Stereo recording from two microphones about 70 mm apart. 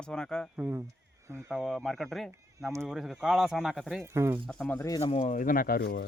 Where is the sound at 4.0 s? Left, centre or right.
Right.